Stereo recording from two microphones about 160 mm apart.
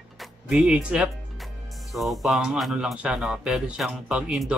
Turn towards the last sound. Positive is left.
turn(degrees=-5)  # may be behind; listen again after turning